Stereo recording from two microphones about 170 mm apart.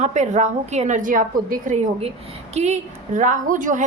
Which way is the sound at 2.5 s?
40° right (ahead or behind).